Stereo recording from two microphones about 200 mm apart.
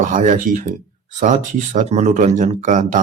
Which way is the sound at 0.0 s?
40° right (ahead or behind).